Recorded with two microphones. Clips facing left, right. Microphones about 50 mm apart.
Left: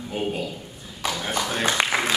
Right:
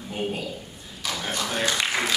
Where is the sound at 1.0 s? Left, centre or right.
Left.